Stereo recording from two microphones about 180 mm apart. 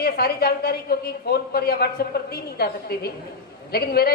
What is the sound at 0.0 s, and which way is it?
A woman's voice, 60° left (ahead or behind).